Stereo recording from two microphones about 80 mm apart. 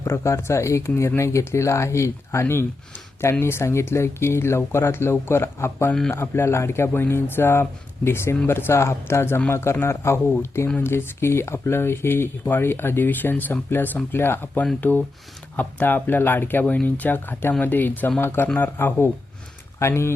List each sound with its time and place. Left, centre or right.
0.0 s speech: left